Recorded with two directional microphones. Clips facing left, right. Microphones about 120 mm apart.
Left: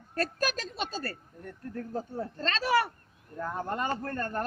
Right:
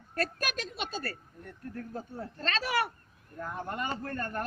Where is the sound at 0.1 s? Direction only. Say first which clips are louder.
Left 3 dB; 35° left (ahead or behind).